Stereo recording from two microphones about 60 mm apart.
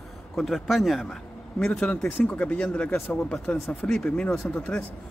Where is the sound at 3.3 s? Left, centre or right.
Centre.